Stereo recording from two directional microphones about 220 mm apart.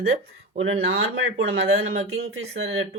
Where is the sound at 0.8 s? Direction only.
65° right (ahead or behind).